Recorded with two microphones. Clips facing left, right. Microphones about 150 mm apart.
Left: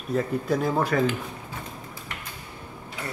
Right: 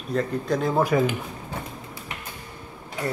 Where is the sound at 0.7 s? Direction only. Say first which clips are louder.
Right 5 dB; 10° right (ahead or behind).